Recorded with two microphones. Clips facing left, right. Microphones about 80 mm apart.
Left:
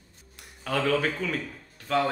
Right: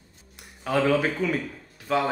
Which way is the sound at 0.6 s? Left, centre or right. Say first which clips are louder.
Right 3 dB; centre.